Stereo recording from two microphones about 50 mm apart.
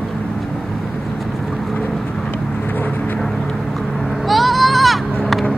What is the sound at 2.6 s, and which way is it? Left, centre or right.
Vehicle, left.